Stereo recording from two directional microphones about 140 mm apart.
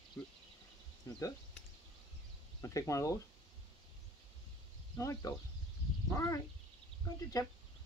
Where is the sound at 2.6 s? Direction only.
25° left (ahead or behind).